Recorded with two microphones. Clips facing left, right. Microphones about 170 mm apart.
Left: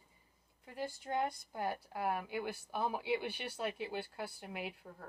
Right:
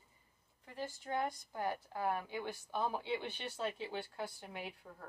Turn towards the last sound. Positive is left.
turn(degrees=5)  # may be behind; listen again after turning